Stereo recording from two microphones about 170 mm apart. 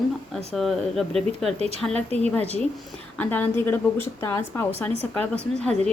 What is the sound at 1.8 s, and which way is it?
Speech, 10° left (ahead or behind).